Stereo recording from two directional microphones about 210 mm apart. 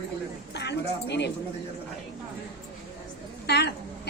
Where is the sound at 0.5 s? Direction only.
55° left (ahead or behind).